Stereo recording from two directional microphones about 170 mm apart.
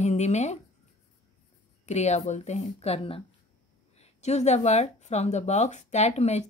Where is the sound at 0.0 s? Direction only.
40° left (ahead or behind).